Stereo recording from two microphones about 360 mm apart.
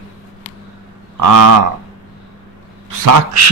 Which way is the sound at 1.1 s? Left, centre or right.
Right.